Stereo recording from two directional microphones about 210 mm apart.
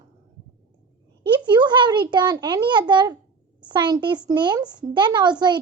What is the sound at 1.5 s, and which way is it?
A child's voice, 20° right (ahead or behind).